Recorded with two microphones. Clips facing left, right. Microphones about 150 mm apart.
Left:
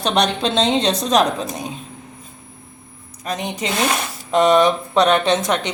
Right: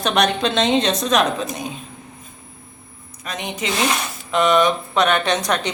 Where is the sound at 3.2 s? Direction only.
35° left (ahead or behind).